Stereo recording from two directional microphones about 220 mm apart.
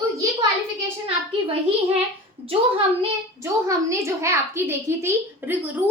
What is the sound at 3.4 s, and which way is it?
A child's voice, 15° right (ahead or behind).